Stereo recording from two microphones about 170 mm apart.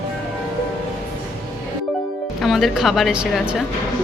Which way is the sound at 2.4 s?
Centre (ahead or behind).